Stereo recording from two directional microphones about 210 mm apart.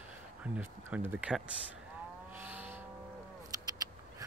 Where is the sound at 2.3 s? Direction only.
5° right (ahead or behind).